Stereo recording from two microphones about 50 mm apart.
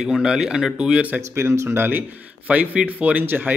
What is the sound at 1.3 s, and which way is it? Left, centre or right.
Speech, right.